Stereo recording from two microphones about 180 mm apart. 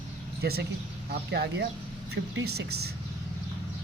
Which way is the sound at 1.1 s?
65° right (ahead or behind).